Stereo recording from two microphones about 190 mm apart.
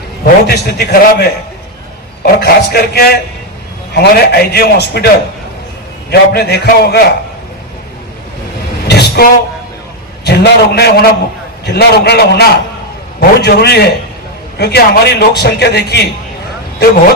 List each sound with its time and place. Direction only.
0.4 s a man's voice: 60° left (ahead or behind)
8.9 s vehicle: 60° left (ahead or behind)
10.2 s a man's voice: 60° left (ahead or behind)